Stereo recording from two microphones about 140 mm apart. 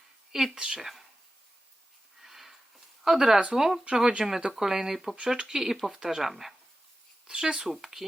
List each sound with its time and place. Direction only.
0.3 s speech: 5° right (ahead or behind)
2.2 s a sound: centre (ahead or behind)
3.0 s speech: 5° right (ahead or behind)